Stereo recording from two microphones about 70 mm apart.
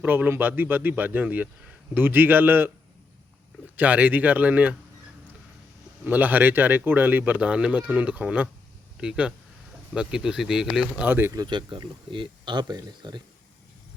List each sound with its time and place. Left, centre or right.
0.0 s speech: right
3.8 s speech: right
6.1 s speech: right; by 11.0 s centre
11.0 s speech: right
11.3 s speech: right